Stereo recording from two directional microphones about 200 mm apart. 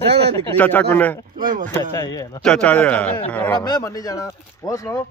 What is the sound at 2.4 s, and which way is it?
Speech, 5° left (ahead or behind).